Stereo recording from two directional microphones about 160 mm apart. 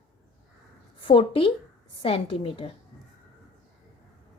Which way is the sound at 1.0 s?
35° left (ahead or behind).